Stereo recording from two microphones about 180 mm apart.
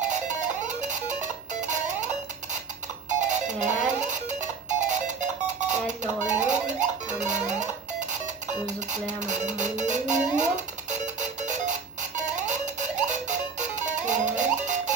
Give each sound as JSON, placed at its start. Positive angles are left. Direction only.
{"t": 0.1, "sound": "music", "side_deg": -40}
{"t": 3.2, "sound": "music", "side_deg": -40}